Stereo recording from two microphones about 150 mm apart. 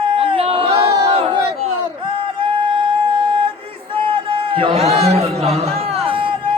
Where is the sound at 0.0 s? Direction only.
35° right (ahead or behind).